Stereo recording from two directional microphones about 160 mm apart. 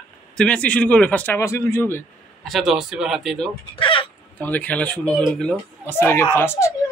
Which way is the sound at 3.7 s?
30° left (ahead or behind).